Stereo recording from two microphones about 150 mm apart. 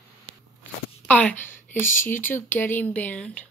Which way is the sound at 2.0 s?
15° left (ahead or behind).